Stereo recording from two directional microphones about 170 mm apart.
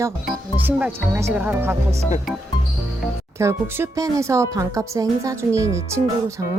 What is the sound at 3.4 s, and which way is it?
A woman's voice, 15° right (ahead or behind).